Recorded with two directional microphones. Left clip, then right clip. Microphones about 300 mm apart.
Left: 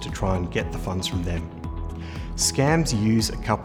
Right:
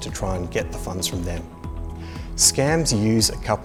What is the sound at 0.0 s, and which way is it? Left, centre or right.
Speech, right.